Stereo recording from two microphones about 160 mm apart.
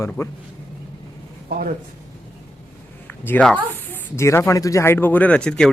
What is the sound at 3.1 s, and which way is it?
Speech, 10° left (ahead or behind).